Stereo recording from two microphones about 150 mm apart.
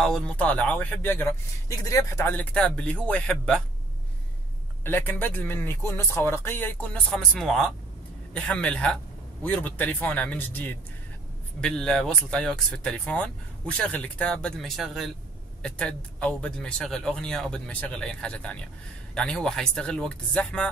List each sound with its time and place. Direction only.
0.0 s speech: 5° left (ahead or behind)
4.8 s speech: 15° left (ahead or behind)